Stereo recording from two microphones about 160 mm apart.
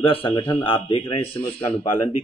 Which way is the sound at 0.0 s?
35° left (ahead or behind).